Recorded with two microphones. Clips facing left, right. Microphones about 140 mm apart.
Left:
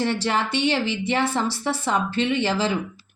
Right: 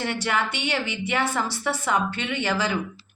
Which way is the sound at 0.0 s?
30° left (ahead or behind).